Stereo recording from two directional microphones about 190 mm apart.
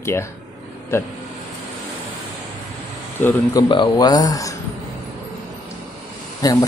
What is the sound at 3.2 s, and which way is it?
Speech, 10° left (ahead or behind).